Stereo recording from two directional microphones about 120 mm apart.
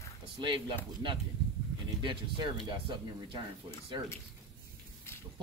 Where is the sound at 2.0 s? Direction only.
40° right (ahead or behind).